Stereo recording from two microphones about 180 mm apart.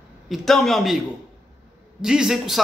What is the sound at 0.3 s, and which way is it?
A man's voice, centre (ahead or behind).